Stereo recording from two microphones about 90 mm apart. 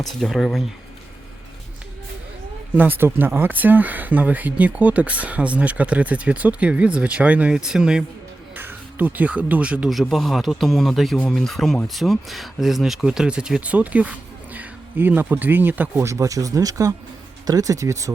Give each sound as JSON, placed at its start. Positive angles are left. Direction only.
{"t": 0.0, "sound": "speech", "side_deg": 0}
{"t": 2.7, "sound": "speech", "side_deg": -20}
{"t": 8.5, "sound": "speech", "side_deg": -20}
{"t": 9.9, "sound": "speech", "side_deg": 0}
{"t": 16.0, "sound": "speech", "side_deg": -35}